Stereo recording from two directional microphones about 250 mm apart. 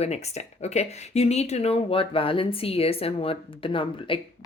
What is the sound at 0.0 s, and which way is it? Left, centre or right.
Speech, left.